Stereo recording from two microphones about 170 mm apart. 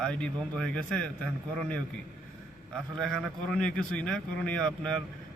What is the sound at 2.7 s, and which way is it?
A man's voice, 5° left (ahead or behind).